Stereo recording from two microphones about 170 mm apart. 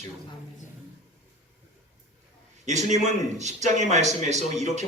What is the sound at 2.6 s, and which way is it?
A man's voice, 45° right (ahead or behind).